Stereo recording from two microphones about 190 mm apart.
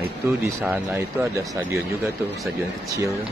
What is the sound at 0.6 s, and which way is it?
Speech, 5° right (ahead or behind).